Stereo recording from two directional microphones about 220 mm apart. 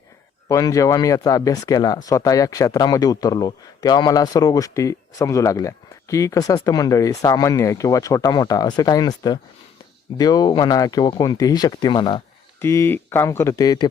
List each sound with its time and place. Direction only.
0.4 s speech: 15° left (ahead or behind)